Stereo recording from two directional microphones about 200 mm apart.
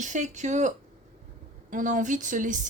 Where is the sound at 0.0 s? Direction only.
35° right (ahead or behind).